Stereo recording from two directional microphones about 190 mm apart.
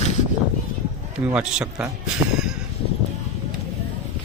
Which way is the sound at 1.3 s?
5° right (ahead or behind).